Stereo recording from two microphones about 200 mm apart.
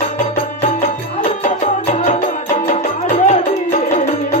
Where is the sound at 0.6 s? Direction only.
35° left (ahead or behind).